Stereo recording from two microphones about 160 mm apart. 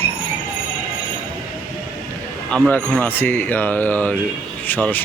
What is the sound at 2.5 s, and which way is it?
Speech, 10° left (ahead or behind).